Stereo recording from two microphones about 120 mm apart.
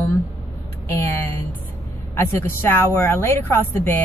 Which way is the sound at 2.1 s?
20° left (ahead or behind).